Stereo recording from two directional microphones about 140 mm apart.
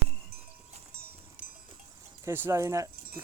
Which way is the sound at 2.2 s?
15° right (ahead or behind).